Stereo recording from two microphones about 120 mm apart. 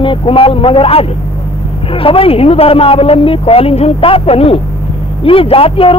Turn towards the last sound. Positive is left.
turn(degrees=50)  # may be behind; listen again after turning